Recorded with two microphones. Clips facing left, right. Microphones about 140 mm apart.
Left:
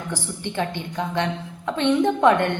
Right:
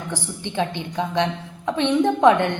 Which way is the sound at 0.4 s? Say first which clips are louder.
Right 2 dB; 15° right (ahead or behind).